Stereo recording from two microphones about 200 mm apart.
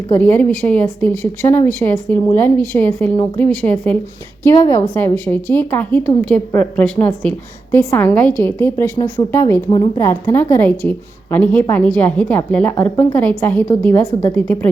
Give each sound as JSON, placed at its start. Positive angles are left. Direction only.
{"t": 0.1, "sound": "a woman's voice", "side_deg": 10}
{"t": 9.6, "sound": "a woman's voice", "side_deg": 25}
{"t": 10.0, "sound": "a woman's voice", "side_deg": 15}